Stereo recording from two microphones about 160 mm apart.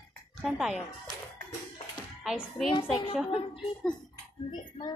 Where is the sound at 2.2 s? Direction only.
5° right (ahead or behind).